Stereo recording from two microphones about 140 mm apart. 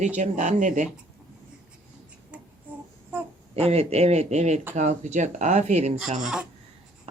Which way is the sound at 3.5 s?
45° right (ahead or behind).